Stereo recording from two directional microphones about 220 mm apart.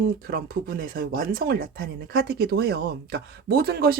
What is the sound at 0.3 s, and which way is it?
Speech, 40° right (ahead or behind).